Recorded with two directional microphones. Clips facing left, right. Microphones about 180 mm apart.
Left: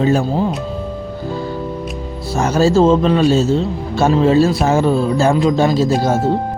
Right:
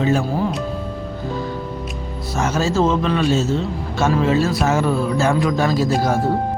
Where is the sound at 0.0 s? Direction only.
35° left (ahead or behind).